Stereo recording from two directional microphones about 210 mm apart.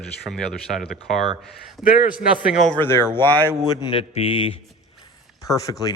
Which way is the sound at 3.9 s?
25° left (ahead or behind).